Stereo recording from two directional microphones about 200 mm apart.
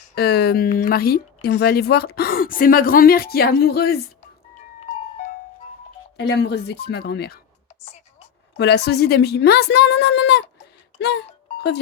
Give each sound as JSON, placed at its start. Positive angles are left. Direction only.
{"t": 0.2, "sound": "a woman's voice", "side_deg": 55}
{"t": 6.1, "sound": "a woman's voice", "side_deg": 55}
{"t": 8.5, "sound": "a woman's voice", "side_deg": 55}
{"t": 11.0, "sound": "music", "side_deg": 55}